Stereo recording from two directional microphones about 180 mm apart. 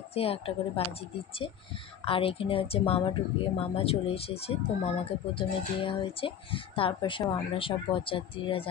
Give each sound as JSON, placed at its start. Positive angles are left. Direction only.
{"t": 0.1, "sound": "speech", "side_deg": 35}
{"t": 2.0, "sound": "speech", "side_deg": 30}